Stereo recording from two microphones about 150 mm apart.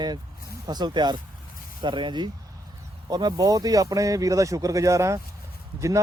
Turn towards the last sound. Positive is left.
turn(degrees=-20)  # may be behind; listen again after turning